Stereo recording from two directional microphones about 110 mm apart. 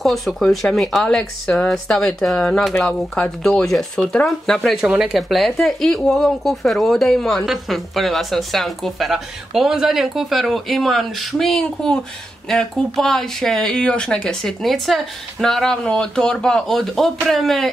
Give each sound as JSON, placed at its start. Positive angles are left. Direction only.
{"t": 0.0, "sound": "speech", "side_deg": 0}
{"t": 4.8, "sound": "speech", "side_deg": -10}